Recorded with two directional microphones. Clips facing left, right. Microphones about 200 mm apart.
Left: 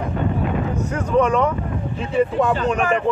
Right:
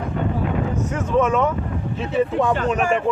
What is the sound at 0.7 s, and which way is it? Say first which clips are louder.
Speech: left 2 dB; centre (ahead or behind).